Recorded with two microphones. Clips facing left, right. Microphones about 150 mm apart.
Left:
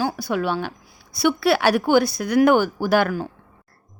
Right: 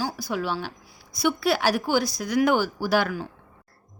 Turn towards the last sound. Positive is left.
turn(degrees=50)  # may be behind; listen again after turning